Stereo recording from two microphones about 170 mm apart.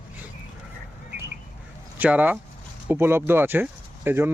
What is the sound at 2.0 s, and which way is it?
Speech, 10° right (ahead or behind).